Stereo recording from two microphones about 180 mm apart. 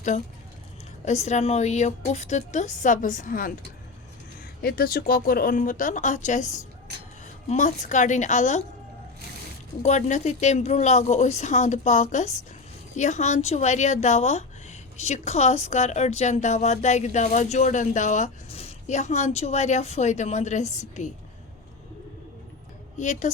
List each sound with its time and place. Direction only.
1.0 s speech: 40° left (ahead or behind)
4.6 s speech: 55° left (ahead or behind); by 8.6 s 40° left (ahead or behind)
9.8 s speech: 40° left (ahead or behind)
23.0 s speech: 40° left (ahead or behind)